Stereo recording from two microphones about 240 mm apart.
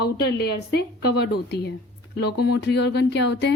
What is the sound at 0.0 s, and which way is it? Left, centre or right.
A woman's voice, left.